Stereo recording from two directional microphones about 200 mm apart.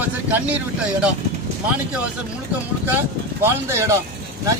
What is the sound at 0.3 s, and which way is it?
Speech, 5° right (ahead or behind).